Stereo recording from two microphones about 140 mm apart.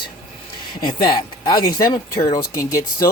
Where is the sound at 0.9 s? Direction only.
30° left (ahead or behind).